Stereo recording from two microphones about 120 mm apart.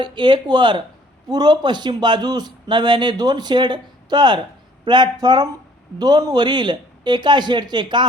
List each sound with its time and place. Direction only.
0.0 s a man's voice: 40° right (ahead or behind)